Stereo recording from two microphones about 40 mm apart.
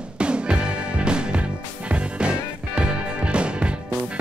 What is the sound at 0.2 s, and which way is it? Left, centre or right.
Music, right.